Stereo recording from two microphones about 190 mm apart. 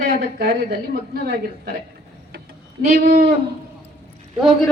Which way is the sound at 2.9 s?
55° right (ahead or behind).